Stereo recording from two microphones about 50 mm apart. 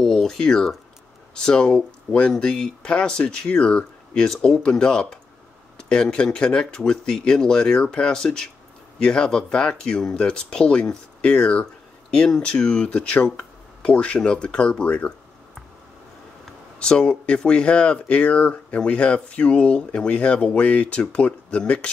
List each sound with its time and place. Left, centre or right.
0.0 s speech: centre; by 15.1 s left
16.8 s speech: centre